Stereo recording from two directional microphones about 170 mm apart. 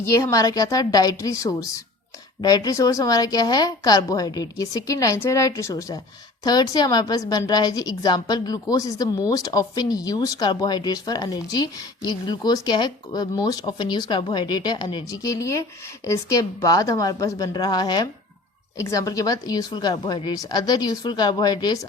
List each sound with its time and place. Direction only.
0.1 s speech: 20° left (ahead or behind)